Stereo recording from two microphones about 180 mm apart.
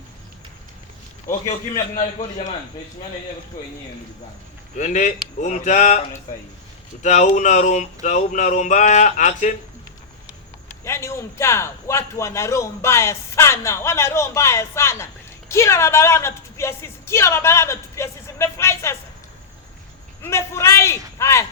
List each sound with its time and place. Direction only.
1.3 s speech: 45° left (ahead or behind)
4.8 s speech: 45° left (ahead or behind)
7.0 s speech: 45° left (ahead or behind)
10.8 s a man's voice: 15° left (ahead or behind)
20.2 s a man's voice: 15° left (ahead or behind)